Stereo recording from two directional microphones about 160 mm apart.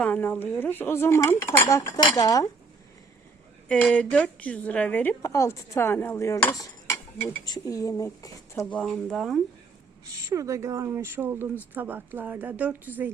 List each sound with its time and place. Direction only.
0.0 s a woman's voice: 10° left (ahead or behind)
3.7 s a woman's voice: 5° left (ahead or behind)
8.6 s speech: 5° left (ahead or behind)
10.1 s speech: 20° right (ahead or behind)